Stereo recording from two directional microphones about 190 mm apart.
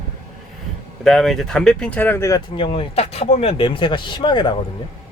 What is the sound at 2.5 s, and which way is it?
Speech, 30° left (ahead or behind).